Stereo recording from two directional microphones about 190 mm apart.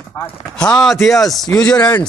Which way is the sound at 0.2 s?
15° left (ahead or behind).